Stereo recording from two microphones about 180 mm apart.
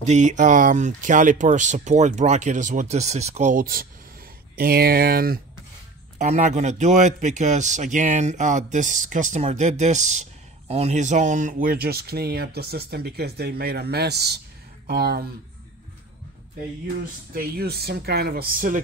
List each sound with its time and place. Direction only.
0.0 s speech: 40° right (ahead or behind); by 5.4 s 55° right (ahead or behind)
6.1 s a man's voice: 40° right (ahead or behind); by 15.2 s 65° right (ahead or behind)
17.0 s speech: 55° right (ahead or behind)